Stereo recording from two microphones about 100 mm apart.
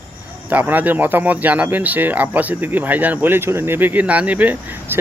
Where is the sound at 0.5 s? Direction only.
15° right (ahead or behind).